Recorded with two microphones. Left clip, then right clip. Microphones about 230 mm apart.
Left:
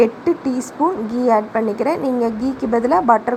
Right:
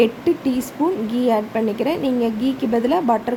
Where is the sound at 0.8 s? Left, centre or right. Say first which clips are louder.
Left 3 dB; centre.